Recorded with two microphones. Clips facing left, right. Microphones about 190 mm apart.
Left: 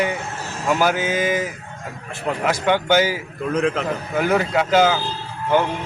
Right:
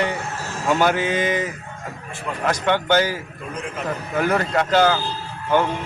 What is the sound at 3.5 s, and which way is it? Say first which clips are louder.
Speech: left 12 dB; 75° left (ahead or behind).